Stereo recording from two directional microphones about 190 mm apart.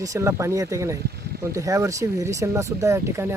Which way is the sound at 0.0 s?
15° right (ahead or behind).